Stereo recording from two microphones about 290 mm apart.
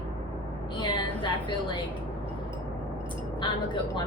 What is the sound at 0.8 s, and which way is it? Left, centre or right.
A woman's voice, centre.